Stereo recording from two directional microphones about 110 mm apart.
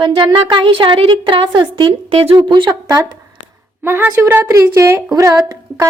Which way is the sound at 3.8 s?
20° right (ahead or behind).